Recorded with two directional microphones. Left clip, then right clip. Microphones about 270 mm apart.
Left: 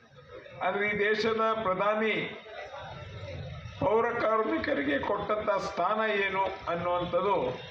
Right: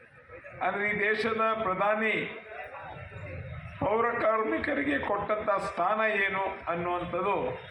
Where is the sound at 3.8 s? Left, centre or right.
Left.